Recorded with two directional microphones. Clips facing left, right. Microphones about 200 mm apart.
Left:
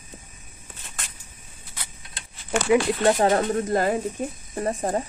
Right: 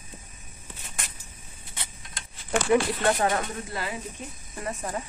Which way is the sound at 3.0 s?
35° left (ahead or behind).